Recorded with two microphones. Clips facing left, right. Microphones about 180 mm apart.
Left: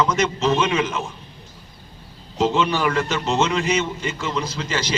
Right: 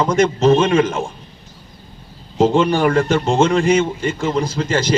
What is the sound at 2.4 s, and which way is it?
A man's voice, 50° right (ahead or behind).